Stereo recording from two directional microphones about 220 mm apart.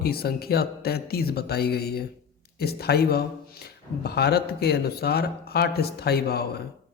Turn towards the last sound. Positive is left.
turn(degrees=45)  # may be behind; listen again after turning